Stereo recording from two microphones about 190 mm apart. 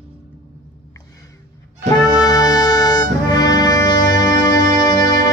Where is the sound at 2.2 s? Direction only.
20° left (ahead or behind).